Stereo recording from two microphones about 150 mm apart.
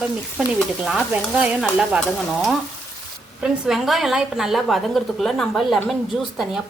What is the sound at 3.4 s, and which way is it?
A woman's voice, centre (ahead or behind).